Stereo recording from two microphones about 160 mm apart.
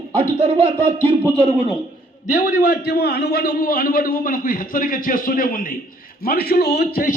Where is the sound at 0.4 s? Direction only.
35° right (ahead or behind).